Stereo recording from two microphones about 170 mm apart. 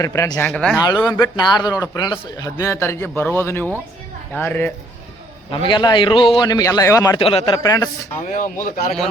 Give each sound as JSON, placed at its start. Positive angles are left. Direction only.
{"t": 0.0, "sound": "a man's voice", "side_deg": 20}
{"t": 1.1, "sound": "a man's voice", "side_deg": 25}
{"t": 5.5, "sound": "a man's voice", "side_deg": 30}
{"t": 7.2, "sound": "a man's voice", "side_deg": 30}
{"t": 7.6, "sound": "a man's voice", "side_deg": 20}
{"t": 8.3, "sound": "speech", "side_deg": 55}